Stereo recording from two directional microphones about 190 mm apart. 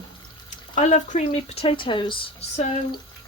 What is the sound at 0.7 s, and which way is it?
Speech, 40° left (ahead or behind).